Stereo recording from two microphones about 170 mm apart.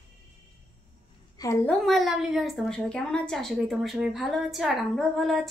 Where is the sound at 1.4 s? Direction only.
15° left (ahead or behind).